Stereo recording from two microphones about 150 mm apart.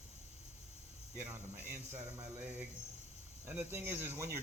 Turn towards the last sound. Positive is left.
turn(degrees=-15)  # may be behind; listen again after turning